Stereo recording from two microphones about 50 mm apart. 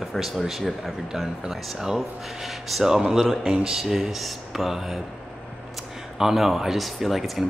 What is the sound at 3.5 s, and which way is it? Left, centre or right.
Speech, centre.